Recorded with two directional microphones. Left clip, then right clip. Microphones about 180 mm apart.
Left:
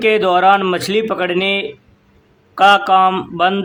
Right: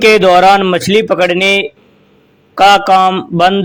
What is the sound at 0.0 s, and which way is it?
A man's voice, 25° right (ahead or behind).